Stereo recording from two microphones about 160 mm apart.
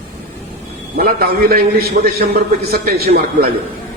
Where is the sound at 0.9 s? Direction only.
70° right (ahead or behind).